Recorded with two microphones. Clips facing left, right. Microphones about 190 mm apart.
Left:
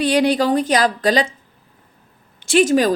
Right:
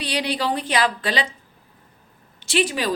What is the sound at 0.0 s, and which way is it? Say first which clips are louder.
A woman's voice: left 9 dB; 50° left (ahead or behind).